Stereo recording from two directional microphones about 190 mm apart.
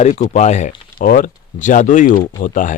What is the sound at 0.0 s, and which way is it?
Speech, 40° left (ahead or behind).